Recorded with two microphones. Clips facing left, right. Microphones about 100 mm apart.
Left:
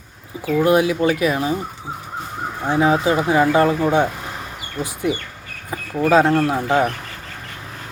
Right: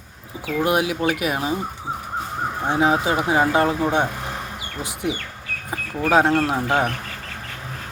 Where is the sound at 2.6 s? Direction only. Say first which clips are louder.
Left 3 dB; 20° right (ahead or behind).